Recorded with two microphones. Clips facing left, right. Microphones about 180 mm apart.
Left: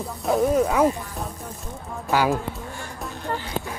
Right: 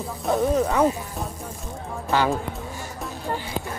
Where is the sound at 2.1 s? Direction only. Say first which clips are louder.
Left 1 dB; 10° left (ahead or behind).